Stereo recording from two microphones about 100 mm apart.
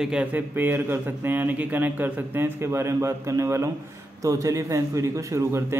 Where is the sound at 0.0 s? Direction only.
10° right (ahead or behind).